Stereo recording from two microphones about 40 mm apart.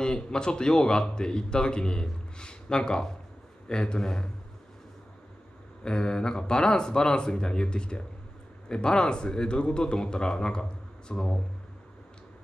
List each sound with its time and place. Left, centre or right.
0.0 s a man's voice: left
5.9 s a man's voice: centre